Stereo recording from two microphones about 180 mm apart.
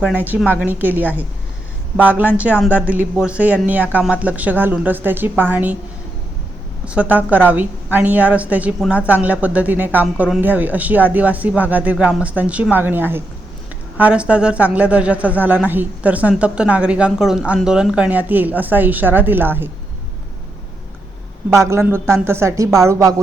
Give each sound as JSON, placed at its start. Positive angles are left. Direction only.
{"t": 0.0, "sound": "a woman's voice", "side_deg": -10}
{"t": 6.8, "sound": "a woman's voice", "side_deg": -5}
{"t": 21.5, "sound": "a woman's voice", "side_deg": -15}